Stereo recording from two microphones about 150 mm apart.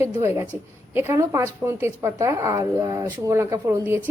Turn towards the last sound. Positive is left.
turn(degrees=-15)  # may be behind; listen again after turning